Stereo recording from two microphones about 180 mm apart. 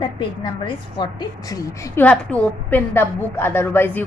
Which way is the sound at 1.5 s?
15° left (ahead or behind).